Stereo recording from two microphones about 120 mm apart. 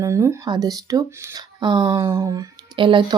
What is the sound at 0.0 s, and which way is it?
Speech, 25° right (ahead or behind).